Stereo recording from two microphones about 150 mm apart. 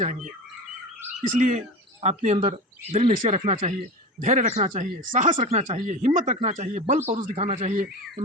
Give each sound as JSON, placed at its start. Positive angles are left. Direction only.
{"t": 0.0, "sound": "speech", "side_deg": -55}
{"t": 2.0, "sound": "speech", "side_deg": -50}